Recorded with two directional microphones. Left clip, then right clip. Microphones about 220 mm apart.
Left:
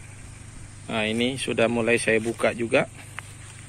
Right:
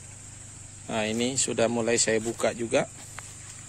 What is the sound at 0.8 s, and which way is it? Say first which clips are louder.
Speech: left 3 dB; 20° right (ahead or behind).